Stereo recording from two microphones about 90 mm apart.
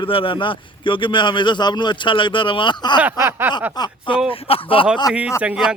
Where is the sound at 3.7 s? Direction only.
60° left (ahead or behind).